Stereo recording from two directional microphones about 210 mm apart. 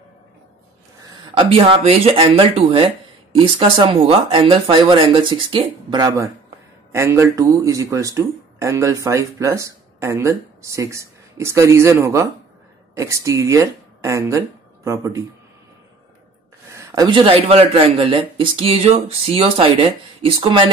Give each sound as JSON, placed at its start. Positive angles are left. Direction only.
{"t": 1.3, "sound": "speech", "side_deg": -25}
{"t": 16.7, "sound": "speech", "side_deg": -15}